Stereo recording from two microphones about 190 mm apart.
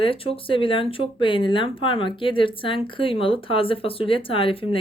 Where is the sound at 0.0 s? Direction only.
30° left (ahead or behind).